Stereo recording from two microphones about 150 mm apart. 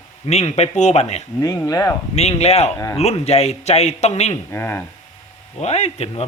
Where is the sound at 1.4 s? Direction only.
25° left (ahead or behind).